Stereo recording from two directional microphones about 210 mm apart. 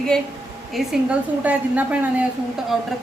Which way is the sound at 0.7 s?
5° right (ahead or behind).